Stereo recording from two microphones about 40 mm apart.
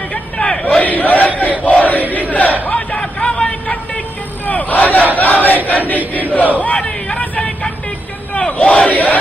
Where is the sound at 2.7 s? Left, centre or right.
Left.